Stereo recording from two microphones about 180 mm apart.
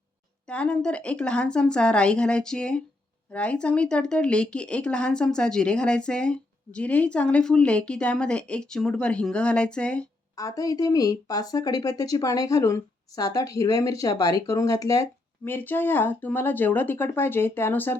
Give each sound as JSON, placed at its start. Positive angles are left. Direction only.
{"t": 0.4, "sound": "speech", "side_deg": 5}
{"t": 10.3, "sound": "speech", "side_deg": 20}